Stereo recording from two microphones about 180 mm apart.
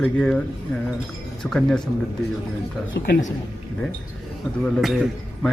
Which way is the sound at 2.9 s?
55° left (ahead or behind).